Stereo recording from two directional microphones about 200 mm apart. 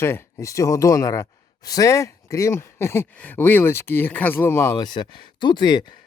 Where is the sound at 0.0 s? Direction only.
10° left (ahead or behind).